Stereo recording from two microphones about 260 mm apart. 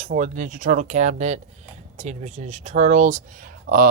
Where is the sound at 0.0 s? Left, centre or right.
Right.